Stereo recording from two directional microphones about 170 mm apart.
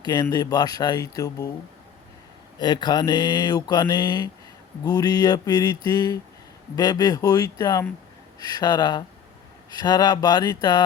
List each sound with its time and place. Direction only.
0.0 s mantra: 20° left (ahead or behind)
2.6 s mantra: 25° left (ahead or behind)